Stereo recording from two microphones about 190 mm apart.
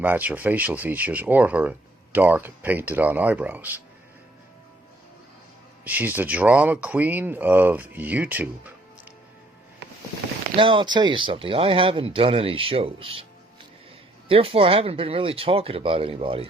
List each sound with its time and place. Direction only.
0.0 s speech: 10° right (ahead or behind)
5.8 s speech: 10° right (ahead or behind)
10.6 s speech: 25° right (ahead or behind)
14.3 s speech: 30° right (ahead or behind)